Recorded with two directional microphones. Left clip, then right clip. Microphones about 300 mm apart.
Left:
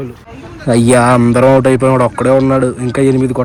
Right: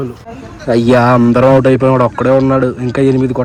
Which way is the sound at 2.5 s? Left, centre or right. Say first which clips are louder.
Even; centre.